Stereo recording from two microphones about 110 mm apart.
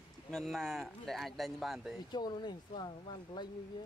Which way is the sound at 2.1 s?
40° left (ahead or behind).